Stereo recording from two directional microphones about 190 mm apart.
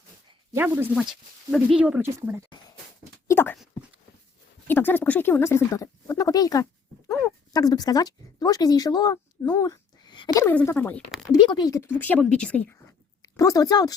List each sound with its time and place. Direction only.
0.5 s speech: 10° right (ahead or behind)
3.2 s a sound: 10° left (ahead or behind)
4.7 s speech: 10° left (ahead or behind)
10.5 s speech: 10° left (ahead or behind)
11.3 s speech: 20° left (ahead or behind)
13.2 s a woman's voice: 20° left (ahead or behind)